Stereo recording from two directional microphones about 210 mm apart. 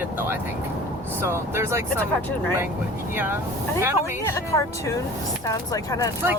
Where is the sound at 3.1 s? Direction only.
10° right (ahead or behind).